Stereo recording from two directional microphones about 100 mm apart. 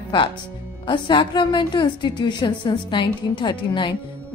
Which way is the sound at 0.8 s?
50° left (ahead or behind).